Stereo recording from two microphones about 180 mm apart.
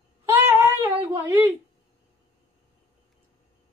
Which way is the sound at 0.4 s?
10° right (ahead or behind).